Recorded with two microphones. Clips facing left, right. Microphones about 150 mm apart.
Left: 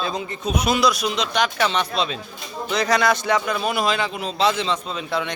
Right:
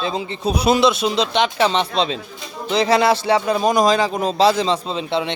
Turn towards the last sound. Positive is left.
turn(degrees=-25)  # may be behind; listen again after turning